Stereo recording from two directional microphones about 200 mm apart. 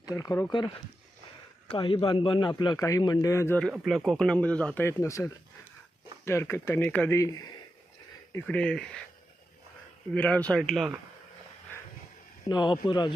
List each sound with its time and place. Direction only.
0.0 s speech: 15° left (ahead or behind)
1.7 s a man's voice: 25° left (ahead or behind); by 8.9 s 5° left (ahead or behind)
10.2 s speech: 5° left (ahead or behind)
12.5 s a man's voice: 20° left (ahead or behind)